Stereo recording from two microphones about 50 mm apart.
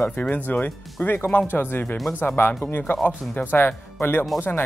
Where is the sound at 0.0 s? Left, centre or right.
Left.